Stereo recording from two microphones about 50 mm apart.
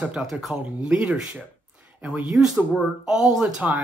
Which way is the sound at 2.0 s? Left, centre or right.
Right.